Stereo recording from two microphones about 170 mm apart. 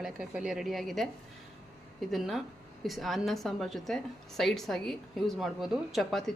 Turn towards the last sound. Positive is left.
turn(degrees=0)  # may be behind; listen again after turning